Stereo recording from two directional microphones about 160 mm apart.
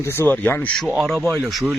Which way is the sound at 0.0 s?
15° left (ahead or behind).